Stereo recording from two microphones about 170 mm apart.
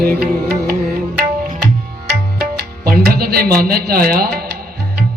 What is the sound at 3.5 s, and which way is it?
Speech, 60° right (ahead or behind).